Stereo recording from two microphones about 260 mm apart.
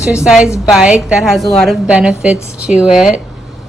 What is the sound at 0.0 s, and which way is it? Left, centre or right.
A woman's voice, centre.